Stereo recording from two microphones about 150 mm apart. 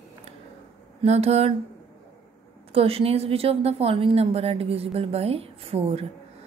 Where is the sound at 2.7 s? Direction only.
40° right (ahead or behind).